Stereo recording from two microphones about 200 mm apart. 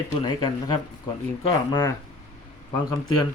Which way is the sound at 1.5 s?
20° left (ahead or behind).